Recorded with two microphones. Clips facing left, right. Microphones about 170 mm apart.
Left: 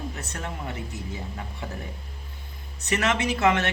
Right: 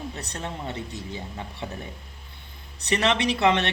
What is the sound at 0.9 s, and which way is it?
Speech, 25° right (ahead or behind).